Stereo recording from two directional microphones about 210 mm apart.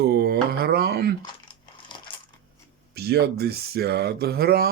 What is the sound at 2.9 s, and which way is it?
Speech, 50° right (ahead or behind).